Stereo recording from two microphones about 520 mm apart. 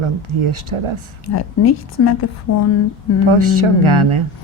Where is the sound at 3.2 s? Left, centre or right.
Right.